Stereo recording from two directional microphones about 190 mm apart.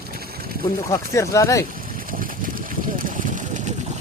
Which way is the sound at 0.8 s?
15° left (ahead or behind).